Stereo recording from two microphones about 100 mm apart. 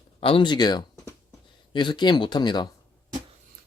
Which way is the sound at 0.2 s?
60° left (ahead or behind).